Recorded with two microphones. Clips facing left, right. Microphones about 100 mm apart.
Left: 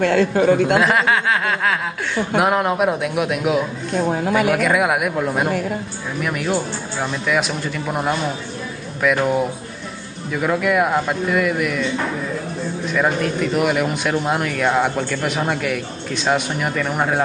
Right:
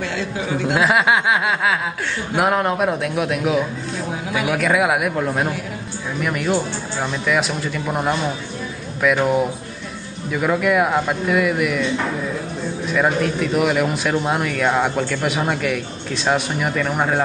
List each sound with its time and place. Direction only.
0.0 s a man's voice: 55° left (ahead or behind)
0.7 s speech: centre (ahead or behind)
1.0 s snicker: 15° right (ahead or behind)
2.3 s speech: centre (ahead or behind)
3.9 s speech: 55° left (ahead or behind)
4.5 s speech: centre (ahead or behind)
12.9 s speech: centre (ahead or behind)